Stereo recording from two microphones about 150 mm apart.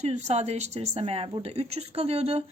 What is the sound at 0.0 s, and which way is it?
A woman's voice, 45° right (ahead or behind).